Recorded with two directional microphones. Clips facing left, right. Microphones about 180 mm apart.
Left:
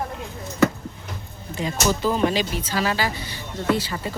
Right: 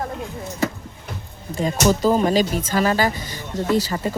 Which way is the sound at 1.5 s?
40° right (ahead or behind).